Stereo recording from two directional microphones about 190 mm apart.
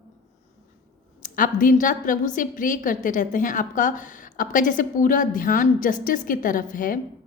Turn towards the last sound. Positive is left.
turn(degrees=45)  # may be behind; listen again after turning